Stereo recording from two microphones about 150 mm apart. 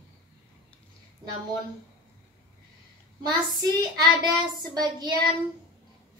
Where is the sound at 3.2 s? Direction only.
25° right (ahead or behind).